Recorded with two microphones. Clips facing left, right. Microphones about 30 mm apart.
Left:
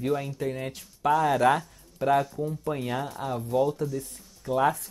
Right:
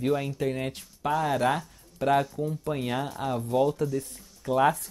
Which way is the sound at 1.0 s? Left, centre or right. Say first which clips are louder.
Left 3 dB; centre.